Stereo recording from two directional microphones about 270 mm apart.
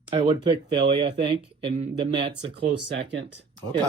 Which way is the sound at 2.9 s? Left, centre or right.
Right.